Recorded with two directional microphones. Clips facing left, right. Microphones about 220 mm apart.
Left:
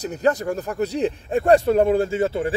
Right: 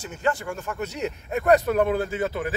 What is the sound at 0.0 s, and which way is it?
Speech, 40° left (ahead or behind).